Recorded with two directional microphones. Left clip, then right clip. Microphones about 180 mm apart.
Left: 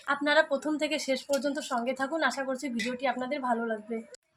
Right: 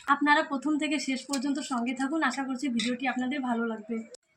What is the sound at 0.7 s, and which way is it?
Speech, 40° left (ahead or behind).